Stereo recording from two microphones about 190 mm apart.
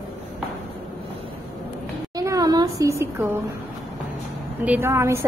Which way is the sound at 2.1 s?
20° right (ahead or behind).